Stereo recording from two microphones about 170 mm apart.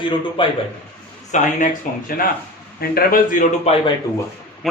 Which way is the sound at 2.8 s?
60° left (ahead or behind).